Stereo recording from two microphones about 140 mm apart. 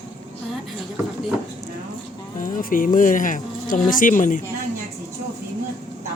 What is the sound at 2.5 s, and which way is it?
Speech, 75° left (ahead or behind).